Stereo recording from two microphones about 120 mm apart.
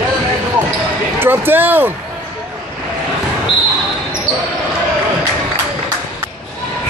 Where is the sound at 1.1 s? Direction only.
20° right (ahead or behind).